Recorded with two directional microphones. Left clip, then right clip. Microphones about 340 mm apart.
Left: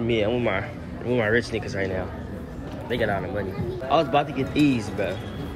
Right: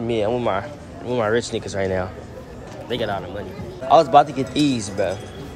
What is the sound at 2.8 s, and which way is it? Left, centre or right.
Speech, right.